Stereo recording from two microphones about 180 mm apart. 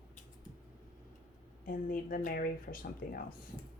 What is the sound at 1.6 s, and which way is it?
Speech, 50° left (ahead or behind).